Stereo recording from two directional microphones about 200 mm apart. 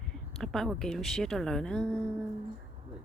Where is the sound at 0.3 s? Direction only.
Centre (ahead or behind).